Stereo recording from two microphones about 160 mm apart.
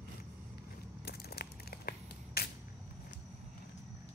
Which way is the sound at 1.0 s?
80° left.